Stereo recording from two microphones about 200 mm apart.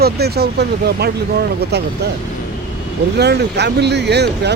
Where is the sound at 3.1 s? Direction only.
55° right (ahead or behind).